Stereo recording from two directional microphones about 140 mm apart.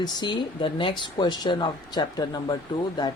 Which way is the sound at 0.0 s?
30° left (ahead or behind).